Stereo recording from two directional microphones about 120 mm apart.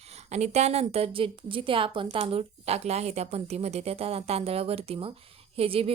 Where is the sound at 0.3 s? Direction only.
70° right (ahead or behind).